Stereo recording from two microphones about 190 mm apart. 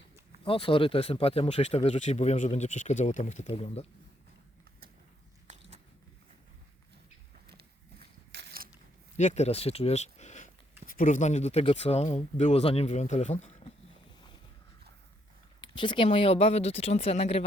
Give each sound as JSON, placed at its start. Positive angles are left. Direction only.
{"t": 0.4, "sound": "speech", "side_deg": 30}
{"t": 5.5, "sound": "biting", "side_deg": -35}
{"t": 7.5, "sound": "a sound", "side_deg": -60}
{"t": 9.1, "sound": "speech", "side_deg": 35}
{"t": 15.6, "sound": "speech", "side_deg": 25}